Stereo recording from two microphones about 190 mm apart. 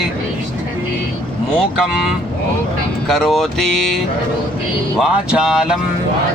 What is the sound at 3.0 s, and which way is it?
Speech, centre (ahead or behind).